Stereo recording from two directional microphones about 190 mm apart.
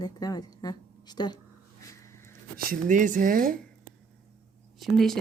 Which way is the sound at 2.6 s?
45° right (ahead or behind).